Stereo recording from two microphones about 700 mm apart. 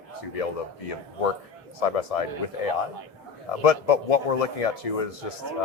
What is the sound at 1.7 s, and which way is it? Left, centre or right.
Speech, left.